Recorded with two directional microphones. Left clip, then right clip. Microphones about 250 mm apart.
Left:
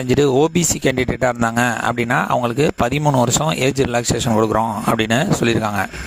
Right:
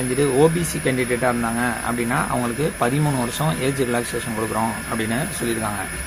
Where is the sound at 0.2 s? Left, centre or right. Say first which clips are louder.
Left 1 dB; left.